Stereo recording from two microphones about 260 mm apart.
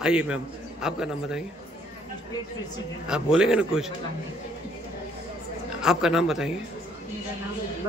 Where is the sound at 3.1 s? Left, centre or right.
Centre.